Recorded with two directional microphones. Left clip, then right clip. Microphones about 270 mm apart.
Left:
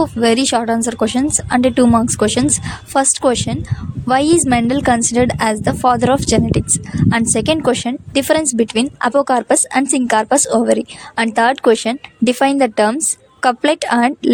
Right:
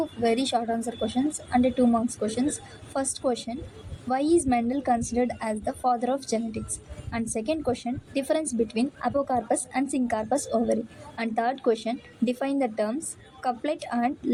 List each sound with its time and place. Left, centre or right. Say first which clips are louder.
0.0 s a woman's voice: left 11 dB; left